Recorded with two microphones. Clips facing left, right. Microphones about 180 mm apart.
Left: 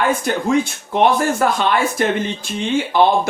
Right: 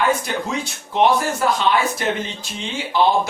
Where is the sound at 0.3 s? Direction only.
55° left (ahead or behind).